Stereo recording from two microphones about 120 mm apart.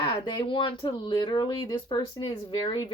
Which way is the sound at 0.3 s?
40° left (ahead or behind).